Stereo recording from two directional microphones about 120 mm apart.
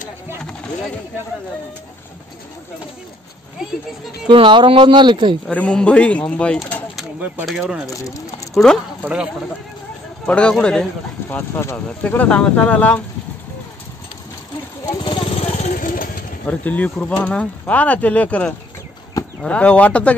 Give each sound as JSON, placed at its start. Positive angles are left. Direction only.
{"t": 0.4, "sound": "a sound", "side_deg": 5}
{"t": 4.3, "sound": "speech", "side_deg": -40}
{"t": 5.5, "sound": "speech", "side_deg": 10}
{"t": 7.4, "sound": "speech", "side_deg": 0}
{"t": 7.9, "sound": "speech", "side_deg": 25}
{"t": 8.5, "sound": "speech", "side_deg": 5}
{"t": 9.0, "sound": "speech", "side_deg": -10}
{"t": 10.2, "sound": "speech", "side_deg": 10}
{"t": 15.0, "sound": "vehicle", "side_deg": 40}
{"t": 16.4, "sound": "speech", "side_deg": 10}